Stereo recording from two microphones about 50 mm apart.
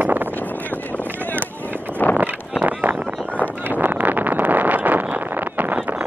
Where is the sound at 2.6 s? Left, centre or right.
Right.